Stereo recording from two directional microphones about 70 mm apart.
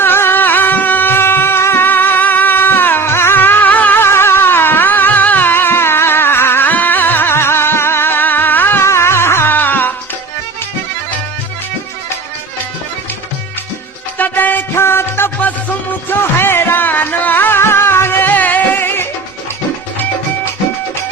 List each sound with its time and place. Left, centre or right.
0.0 s music: left
4.0 s music: left
14.2 s music: left